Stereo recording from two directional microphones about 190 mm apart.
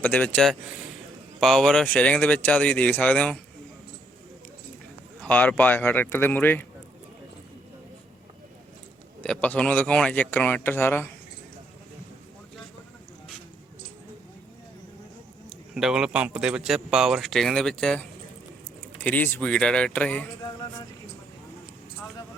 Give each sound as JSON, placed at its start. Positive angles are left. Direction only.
{"t": 0.0, "sound": "speech", "side_deg": 10}
{"t": 5.2, "sound": "speech", "side_deg": 5}
{"t": 9.2, "sound": "speech", "side_deg": 5}
{"t": 15.7, "sound": "speech", "side_deg": -5}
{"t": 19.0, "sound": "speech", "side_deg": 10}
{"t": 20.4, "sound": "a sound", "side_deg": 20}